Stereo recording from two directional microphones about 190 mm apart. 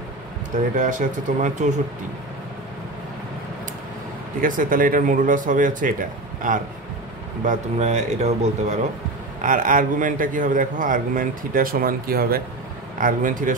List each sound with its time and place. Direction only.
0.7 s speech: 45° right (ahead or behind)
4.4 s a man's voice: 45° right (ahead or behind)